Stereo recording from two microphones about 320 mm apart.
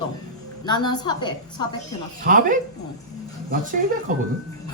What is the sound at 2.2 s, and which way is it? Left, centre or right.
Speech, right.